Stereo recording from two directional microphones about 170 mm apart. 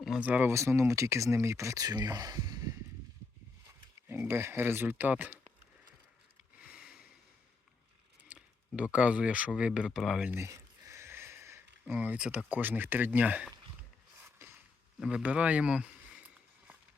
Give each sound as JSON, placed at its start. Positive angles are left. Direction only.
{"t": 0.0, "sound": "speech", "side_deg": -5}
{"t": 4.1, "sound": "speech", "side_deg": -15}
{"t": 6.7, "sound": "sniff", "side_deg": 60}
{"t": 8.3, "sound": "speech", "side_deg": -5}
{"t": 14.2, "sound": "a sound", "side_deg": -10}